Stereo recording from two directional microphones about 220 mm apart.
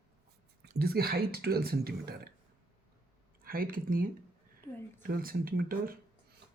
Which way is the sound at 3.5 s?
40° right (ahead or behind).